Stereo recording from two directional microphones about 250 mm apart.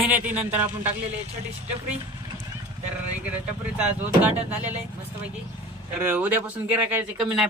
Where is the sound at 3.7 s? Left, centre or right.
Centre.